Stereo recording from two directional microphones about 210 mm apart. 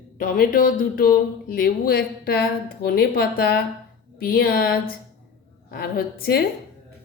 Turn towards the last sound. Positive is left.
turn(degrees=45)  # may be behind; listen again after turning